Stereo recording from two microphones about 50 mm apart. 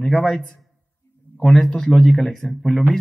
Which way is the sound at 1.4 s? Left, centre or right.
Centre.